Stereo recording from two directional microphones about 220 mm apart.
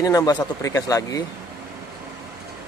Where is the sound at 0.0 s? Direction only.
15° left (ahead or behind).